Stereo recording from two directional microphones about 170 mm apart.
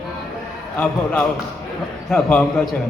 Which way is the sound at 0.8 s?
10° left (ahead or behind).